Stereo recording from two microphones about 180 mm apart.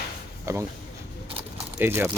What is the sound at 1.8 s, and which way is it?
Speech, 10° right (ahead or behind).